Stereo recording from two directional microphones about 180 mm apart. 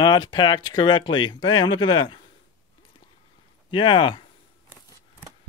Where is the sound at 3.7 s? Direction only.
25° left (ahead or behind).